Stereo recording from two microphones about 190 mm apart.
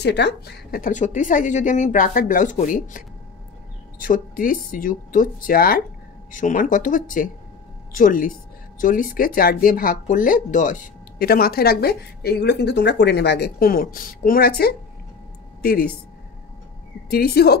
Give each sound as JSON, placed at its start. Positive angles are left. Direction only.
{"t": 0.0, "sound": "speech", "side_deg": 60}
{"t": 4.0, "sound": "speech", "side_deg": 45}
{"t": 17.1, "sound": "speech", "side_deg": 55}